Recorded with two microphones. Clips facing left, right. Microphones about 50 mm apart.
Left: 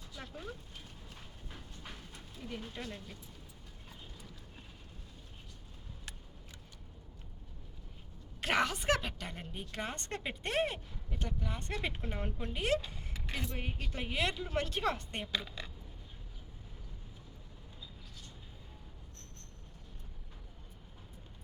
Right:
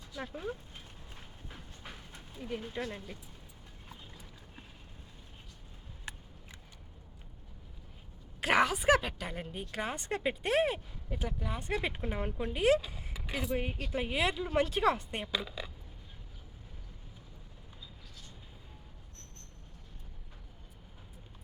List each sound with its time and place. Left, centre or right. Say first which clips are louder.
0.2 s a woman's voice: right 7 dB; centre
1.1 s train: right 2 dB; centre
2.4 s a woman's voice: right 5 dB; centre
3.8 s clip-clop: right 1 dB; centre
8.4 s a woman's voice: right 4 dB; centre